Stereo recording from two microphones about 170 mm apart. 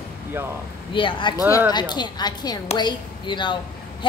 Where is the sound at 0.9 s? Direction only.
30° left (ahead or behind).